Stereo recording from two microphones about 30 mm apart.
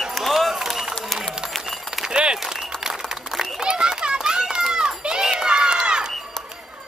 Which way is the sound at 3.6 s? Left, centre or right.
Right.